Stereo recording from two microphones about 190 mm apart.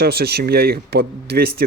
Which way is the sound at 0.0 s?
55° right (ahead or behind).